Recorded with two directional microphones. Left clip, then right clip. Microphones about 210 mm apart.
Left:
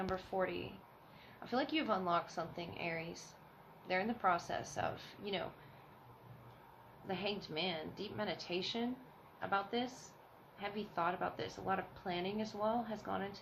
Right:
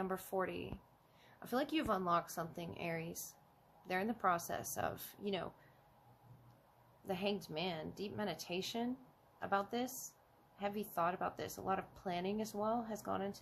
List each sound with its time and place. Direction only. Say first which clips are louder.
0.1 s speech: left 2 dB; 50° right (ahead or behind)
7.1 s speech: even; 55° right (ahead or behind)